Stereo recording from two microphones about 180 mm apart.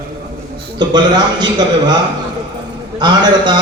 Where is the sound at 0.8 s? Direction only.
25° right (ahead or behind).